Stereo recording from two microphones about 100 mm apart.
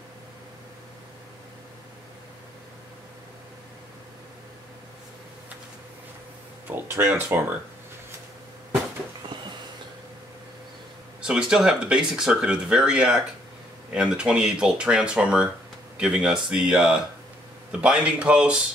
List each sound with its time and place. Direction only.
6.7 s speech: 25° right (ahead or behind)
11.1 s speech: 10° right (ahead or behind)